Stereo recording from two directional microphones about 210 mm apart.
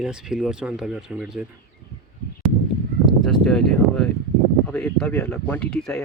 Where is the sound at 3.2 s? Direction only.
Centre (ahead or behind).